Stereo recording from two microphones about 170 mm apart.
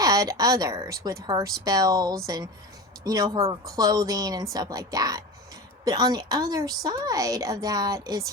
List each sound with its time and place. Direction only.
0.0 s a woman's voice: 20° right (ahead or behind)